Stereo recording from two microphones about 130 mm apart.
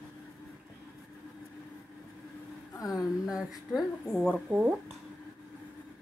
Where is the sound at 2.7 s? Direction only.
25° left (ahead or behind).